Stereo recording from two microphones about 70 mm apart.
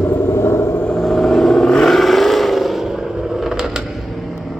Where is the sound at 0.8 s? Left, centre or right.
Centre.